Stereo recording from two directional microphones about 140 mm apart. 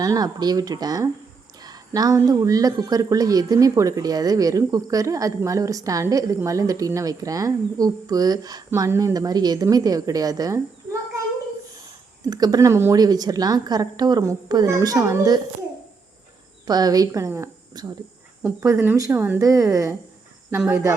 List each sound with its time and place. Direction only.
0.0 s speech: 25° right (ahead or behind)
12.2 s speech: 30° right (ahead or behind)
16.6 s speech: 30° right (ahead or behind)